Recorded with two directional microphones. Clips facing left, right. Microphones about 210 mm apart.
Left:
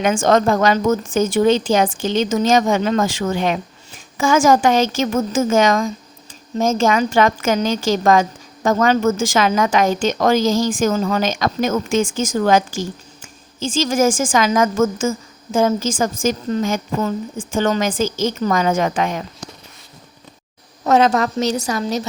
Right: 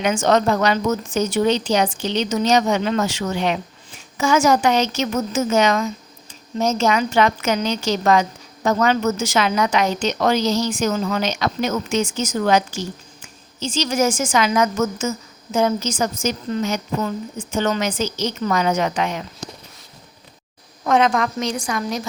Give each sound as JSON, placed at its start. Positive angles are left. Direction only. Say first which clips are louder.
{"t": 0.0, "sound": "a woman's voice", "louder": "left 2 dB", "side_deg": 50}
{"t": 20.8, "sound": "a woman's voice", "louder": "left 3 dB", "side_deg": 40}